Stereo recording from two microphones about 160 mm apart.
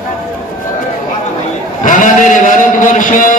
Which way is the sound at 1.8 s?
55° left (ahead or behind).